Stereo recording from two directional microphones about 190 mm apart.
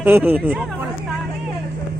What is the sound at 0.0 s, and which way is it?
Speech, 10° right (ahead or behind).